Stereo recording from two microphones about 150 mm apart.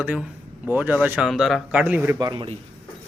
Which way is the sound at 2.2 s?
30° right (ahead or behind).